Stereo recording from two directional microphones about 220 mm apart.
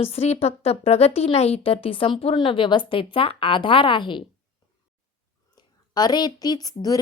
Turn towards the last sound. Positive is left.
turn(degrees=15)  # may be behind; listen again after turning